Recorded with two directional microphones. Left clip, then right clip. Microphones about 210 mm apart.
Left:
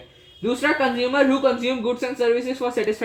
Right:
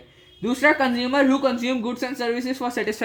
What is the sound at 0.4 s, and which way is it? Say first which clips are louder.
Speech: right 1 dB; 50° right (ahead or behind).